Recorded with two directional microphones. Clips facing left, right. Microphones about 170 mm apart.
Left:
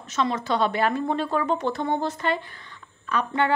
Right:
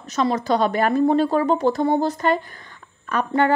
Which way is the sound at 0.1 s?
40° right (ahead or behind).